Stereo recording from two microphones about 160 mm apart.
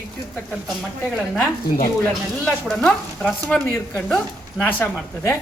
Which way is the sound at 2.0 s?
5° left (ahead or behind).